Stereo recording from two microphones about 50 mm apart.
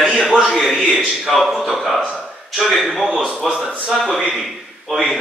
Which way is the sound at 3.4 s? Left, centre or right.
Centre.